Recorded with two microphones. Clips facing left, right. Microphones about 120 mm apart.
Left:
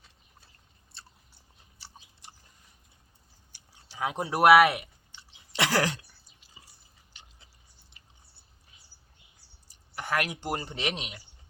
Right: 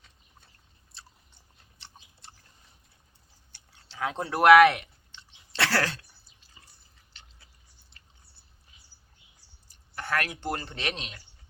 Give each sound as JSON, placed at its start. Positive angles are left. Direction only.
{"t": 2.2, "sound": "biting", "side_deg": 15}
{"t": 3.5, "sound": "chewing", "side_deg": 10}
{"t": 9.6, "sound": "speech", "side_deg": 15}